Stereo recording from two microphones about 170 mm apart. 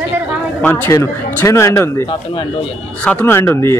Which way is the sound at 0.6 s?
10° left (ahead or behind).